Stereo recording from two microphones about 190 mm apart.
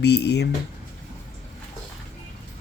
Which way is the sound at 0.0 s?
60° left (ahead or behind).